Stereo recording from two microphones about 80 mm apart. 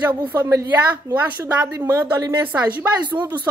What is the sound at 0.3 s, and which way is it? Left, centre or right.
Speech, right.